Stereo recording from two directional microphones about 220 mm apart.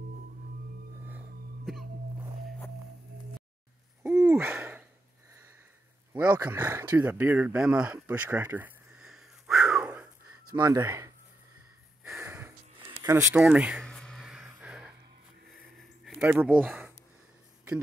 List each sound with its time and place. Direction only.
4.0 s owl: 10° right (ahead or behind)
6.1 s a sound: 10° right (ahead or behind)
10.5 s speech: 15° right (ahead or behind)
12.0 s snort: 5° right (ahead or behind)
13.0 s a sound: 10° right (ahead or behind)
16.2 s speech: 5° right (ahead or behind)